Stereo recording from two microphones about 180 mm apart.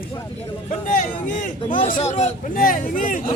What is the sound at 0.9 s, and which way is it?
Speech, 45° left (ahead or behind).